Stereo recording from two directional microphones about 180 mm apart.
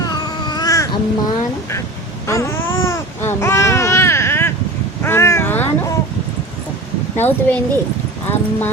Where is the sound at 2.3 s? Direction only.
15° left (ahead or behind).